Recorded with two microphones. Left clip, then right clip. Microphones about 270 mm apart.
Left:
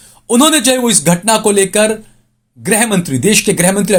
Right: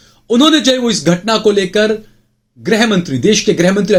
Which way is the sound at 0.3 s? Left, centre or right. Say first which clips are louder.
Even; left.